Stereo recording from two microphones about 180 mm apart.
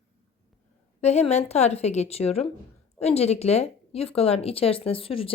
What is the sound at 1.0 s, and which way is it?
A woman's voice, 35° left (ahead or behind).